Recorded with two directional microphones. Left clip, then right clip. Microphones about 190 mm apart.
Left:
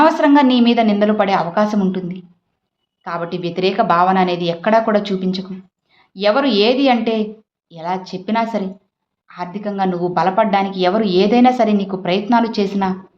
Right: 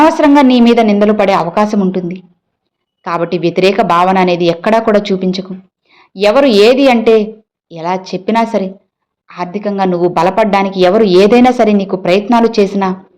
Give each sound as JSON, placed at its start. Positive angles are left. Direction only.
{"t": 0.0, "sound": "a woman's voice", "side_deg": -25}